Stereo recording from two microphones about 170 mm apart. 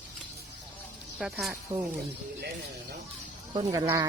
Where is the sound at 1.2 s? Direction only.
Centre (ahead or behind).